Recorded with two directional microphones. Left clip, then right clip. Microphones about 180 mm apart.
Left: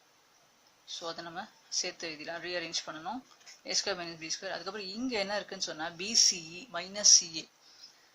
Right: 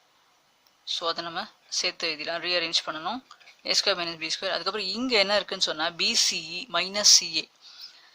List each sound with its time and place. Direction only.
0.9 s speech: 45° right (ahead or behind)